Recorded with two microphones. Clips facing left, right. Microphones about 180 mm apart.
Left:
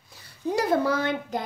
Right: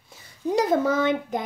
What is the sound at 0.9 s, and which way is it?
Speech, 20° right (ahead or behind).